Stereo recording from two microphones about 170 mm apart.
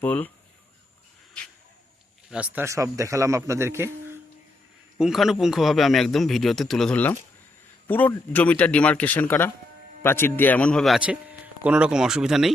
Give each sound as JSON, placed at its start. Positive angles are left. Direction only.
{"t": 0.0, "sound": "speech", "side_deg": 10}
{"t": 2.3, "sound": "a man's voice", "side_deg": -5}
{"t": 2.6, "sound": "a man's voice", "side_deg": -20}
{"t": 4.9, "sound": "a man's voice", "side_deg": 0}